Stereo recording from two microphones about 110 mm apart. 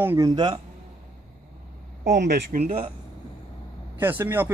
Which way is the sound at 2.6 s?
75° right (ahead or behind).